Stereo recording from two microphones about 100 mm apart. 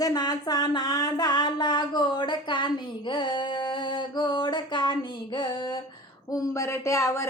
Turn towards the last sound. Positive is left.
turn(degrees=30)  # may be behind; listen again after turning